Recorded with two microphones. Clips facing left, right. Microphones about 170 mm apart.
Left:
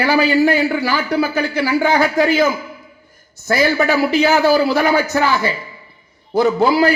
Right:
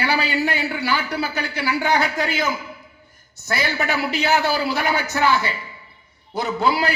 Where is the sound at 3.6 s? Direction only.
45° left (ahead or behind).